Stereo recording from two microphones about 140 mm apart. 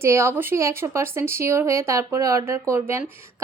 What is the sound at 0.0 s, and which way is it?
A woman's voice, 20° right (ahead or behind).